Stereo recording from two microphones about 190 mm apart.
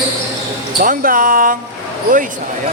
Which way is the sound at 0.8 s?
45° right (ahead or behind).